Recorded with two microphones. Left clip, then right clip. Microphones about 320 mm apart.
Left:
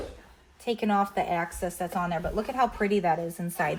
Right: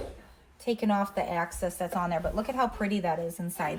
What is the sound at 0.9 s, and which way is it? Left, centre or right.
Speech, centre.